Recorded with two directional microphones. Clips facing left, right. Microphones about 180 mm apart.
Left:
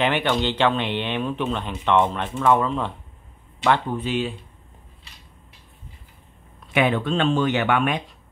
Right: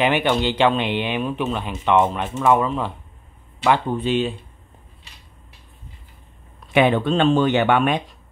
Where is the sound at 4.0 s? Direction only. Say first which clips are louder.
Right 4 dB; 25° right (ahead or behind).